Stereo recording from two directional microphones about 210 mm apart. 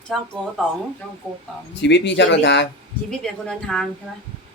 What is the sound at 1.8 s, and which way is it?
Speech, 55° left (ahead or behind).